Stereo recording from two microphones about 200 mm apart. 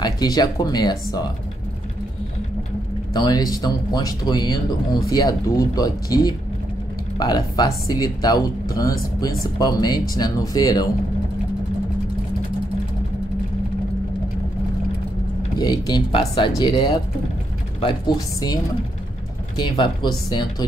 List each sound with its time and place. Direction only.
0.0 s speech: 20° left (ahead or behind)
3.1 s speech: 20° left (ahead or behind)
15.6 s speech: 20° left (ahead or behind)